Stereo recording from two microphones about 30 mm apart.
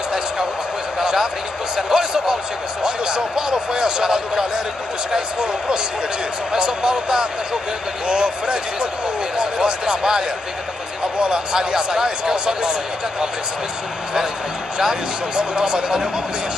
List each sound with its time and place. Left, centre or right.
1.8 s speech: right
15.3 s speech: right